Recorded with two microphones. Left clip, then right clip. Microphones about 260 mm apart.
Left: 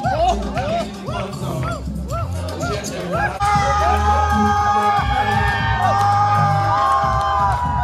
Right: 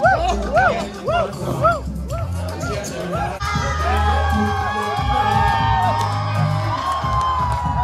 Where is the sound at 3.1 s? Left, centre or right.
Centre.